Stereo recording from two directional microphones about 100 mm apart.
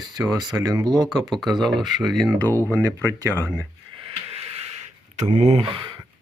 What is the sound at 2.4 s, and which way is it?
Speech, 20° left (ahead or behind).